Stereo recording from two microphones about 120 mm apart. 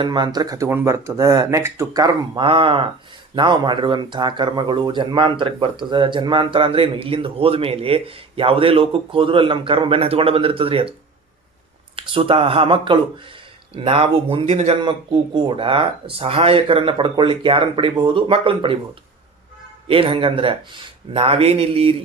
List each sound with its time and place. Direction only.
0.0 s speech: 40° right (ahead or behind)
0.7 s speech: 20° right (ahead or behind); by 10.9 s 50° right (ahead or behind)
11.9 s speech: 50° right (ahead or behind)
14.8 s speech: 40° right (ahead or behind)
19.9 s speech: 50° right (ahead or behind)